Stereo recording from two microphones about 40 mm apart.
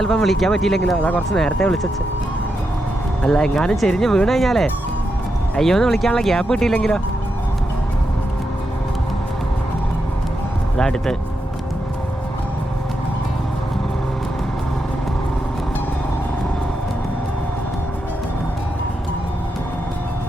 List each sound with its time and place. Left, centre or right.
0.0 s speech: centre
0.9 s speech: left
1.5 s speech: left
3.2 s speech: centre
10.8 s speech: centre